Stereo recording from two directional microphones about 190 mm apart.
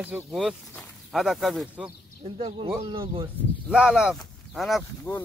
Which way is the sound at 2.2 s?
30° right (ahead or behind).